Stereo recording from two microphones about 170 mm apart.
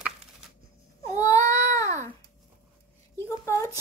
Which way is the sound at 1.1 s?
20° left (ahead or behind).